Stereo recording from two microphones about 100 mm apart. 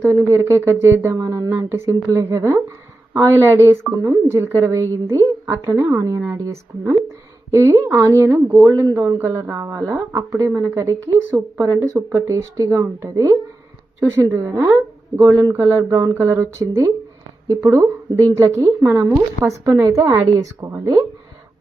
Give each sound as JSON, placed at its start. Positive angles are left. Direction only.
{"t": 0.0, "sound": "speech", "side_deg": -25}